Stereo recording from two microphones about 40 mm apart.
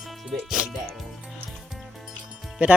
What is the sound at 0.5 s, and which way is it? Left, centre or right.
Speech, centre.